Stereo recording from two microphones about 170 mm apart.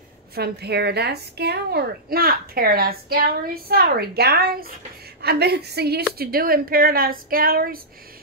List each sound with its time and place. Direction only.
0.3 s a woman's voice: 70° right (ahead or behind)